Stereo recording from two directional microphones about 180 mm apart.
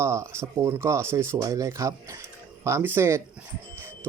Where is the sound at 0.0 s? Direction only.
15° right (ahead or behind).